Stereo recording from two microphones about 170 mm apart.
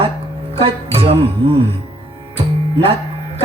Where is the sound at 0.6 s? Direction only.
35° right (ahead or behind).